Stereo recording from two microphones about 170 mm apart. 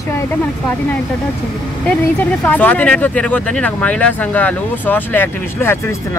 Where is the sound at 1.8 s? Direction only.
10° left (ahead or behind).